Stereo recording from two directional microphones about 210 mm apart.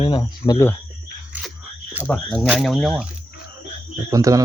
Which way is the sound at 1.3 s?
10° right (ahead or behind).